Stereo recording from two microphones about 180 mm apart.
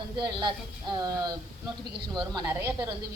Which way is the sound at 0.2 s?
25° right (ahead or behind).